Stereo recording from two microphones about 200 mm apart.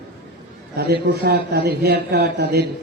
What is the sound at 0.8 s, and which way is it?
A man's voice, 55° right (ahead or behind).